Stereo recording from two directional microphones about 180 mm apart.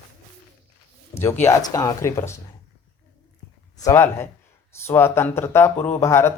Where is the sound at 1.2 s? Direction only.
15° left (ahead or behind).